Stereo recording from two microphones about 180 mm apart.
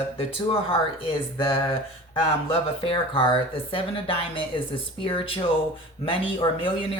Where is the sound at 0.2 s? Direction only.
30° left (ahead or behind).